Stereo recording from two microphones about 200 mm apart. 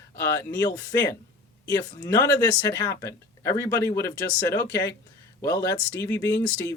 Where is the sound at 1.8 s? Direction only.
15° left (ahead or behind).